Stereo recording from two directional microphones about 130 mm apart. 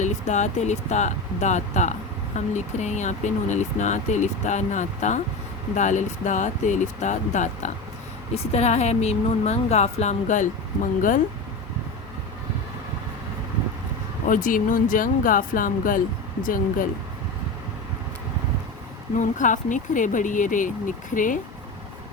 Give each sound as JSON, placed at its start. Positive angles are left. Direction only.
{"t": 0.0, "sound": "a woman's voice", "side_deg": 65}
{"t": 8.3, "sound": "a woman's voice", "side_deg": 55}
{"t": 14.3, "sound": "speech", "side_deg": 90}
{"t": 19.2, "sound": "speech", "side_deg": 80}